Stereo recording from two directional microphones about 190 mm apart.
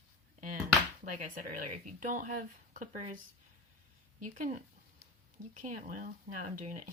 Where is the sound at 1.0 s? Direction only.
45° right (ahead or behind).